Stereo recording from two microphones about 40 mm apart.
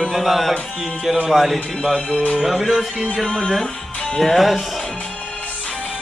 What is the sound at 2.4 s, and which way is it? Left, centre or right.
Music, centre.